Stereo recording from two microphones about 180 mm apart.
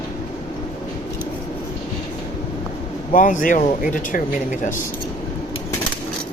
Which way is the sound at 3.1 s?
45° left (ahead or behind).